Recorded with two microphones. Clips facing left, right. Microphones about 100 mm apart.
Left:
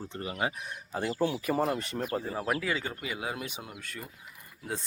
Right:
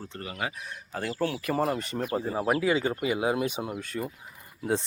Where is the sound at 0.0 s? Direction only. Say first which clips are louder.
Left 2 dB; 15° left (ahead or behind).